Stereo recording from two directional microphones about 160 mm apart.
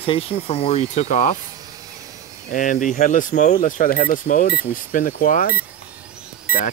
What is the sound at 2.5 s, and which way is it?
Speech, 55° left (ahead or behind).